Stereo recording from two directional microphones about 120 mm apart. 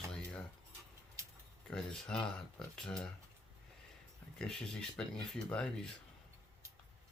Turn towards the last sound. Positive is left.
turn(degrees=10)  # may be behind; listen again after turning